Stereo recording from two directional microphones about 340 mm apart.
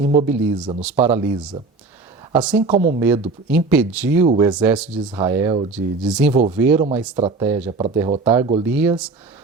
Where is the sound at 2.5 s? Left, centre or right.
Centre.